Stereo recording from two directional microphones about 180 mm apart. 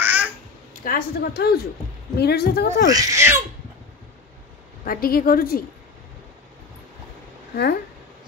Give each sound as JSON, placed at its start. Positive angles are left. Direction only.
{"t": 0.0, "sound": "babbling", "side_deg": -10}
{"t": 0.8, "sound": "a woman's voice", "side_deg": 60}
{"t": 2.9, "sound": "speech", "side_deg": -20}
{"t": 4.8, "sound": "a woman's voice", "side_deg": 55}